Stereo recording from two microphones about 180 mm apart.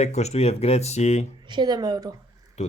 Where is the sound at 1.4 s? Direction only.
25° right (ahead or behind).